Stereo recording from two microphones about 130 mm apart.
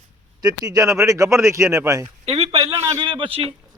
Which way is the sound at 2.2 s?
55° right (ahead or behind).